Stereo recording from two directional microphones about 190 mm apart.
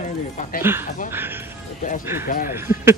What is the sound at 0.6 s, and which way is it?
Speech, 10° right (ahead or behind).